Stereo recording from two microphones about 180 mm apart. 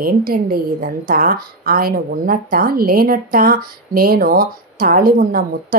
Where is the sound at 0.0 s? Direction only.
55° right (ahead or behind).